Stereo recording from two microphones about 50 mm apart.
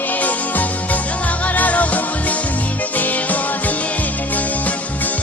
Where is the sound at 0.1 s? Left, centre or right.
Left.